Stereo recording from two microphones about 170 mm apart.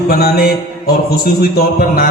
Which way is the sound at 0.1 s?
65° left (ahead or behind).